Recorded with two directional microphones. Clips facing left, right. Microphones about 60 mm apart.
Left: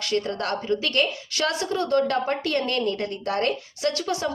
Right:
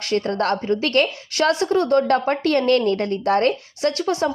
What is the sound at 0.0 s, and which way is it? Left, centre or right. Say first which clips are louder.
Speech: right 5 dB; right.